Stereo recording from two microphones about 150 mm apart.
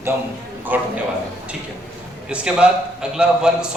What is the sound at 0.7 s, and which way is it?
Speech, 10° right (ahead or behind).